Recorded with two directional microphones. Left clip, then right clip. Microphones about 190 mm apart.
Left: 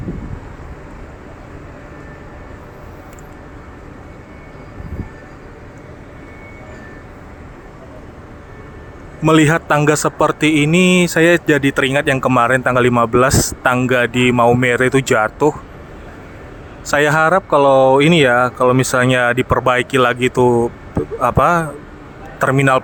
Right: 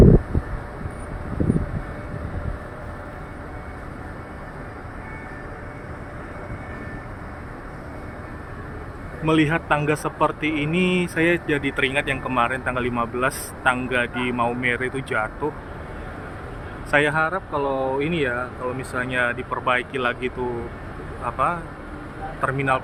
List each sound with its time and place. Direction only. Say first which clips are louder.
9.2 s a man's voice: left 8 dB; 40° left (ahead or behind)
16.9 s a man's voice: left 7 dB; 45° left (ahead or behind)